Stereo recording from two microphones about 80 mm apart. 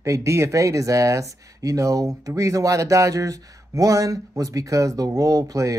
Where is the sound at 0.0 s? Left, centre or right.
Right.